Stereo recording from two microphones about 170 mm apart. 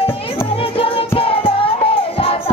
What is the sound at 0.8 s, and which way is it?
Music, 30° left (ahead or behind).